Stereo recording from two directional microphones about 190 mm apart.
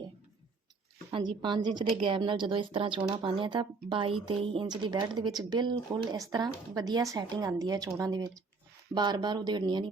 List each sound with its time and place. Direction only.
1.1 s speech: 25° right (ahead or behind)